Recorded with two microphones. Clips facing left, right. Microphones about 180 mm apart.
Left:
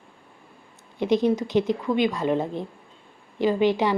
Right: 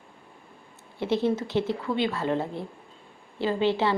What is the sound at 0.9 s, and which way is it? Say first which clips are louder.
Speech: left 4 dB; 15° left (ahead or behind).